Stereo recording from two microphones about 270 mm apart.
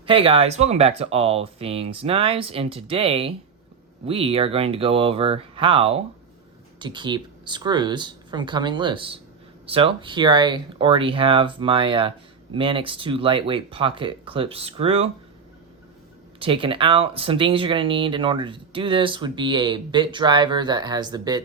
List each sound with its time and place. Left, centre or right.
0.0 s speech: centre
16.4 s speech: centre